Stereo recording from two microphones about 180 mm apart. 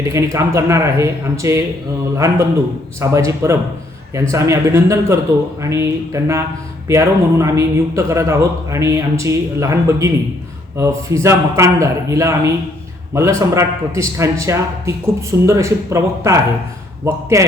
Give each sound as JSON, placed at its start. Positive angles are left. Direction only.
{"t": 0.0, "sound": "a man's voice", "side_deg": -15}